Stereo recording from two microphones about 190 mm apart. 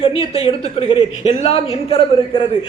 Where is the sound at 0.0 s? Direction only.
30° left (ahead or behind).